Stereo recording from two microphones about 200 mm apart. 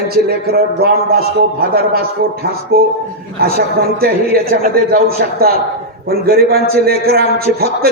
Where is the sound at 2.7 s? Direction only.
50° right (ahead or behind).